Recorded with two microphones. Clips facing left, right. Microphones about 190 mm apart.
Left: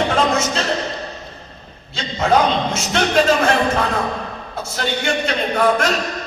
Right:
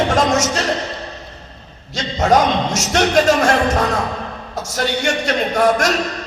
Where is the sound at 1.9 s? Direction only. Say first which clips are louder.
Right 2 dB; 45° right (ahead or behind).